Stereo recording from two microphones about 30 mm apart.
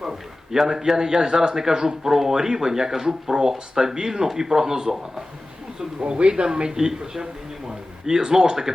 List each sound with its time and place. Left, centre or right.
0.0 s a sound: centre
0.7 s speech: centre
6.0 s speech: right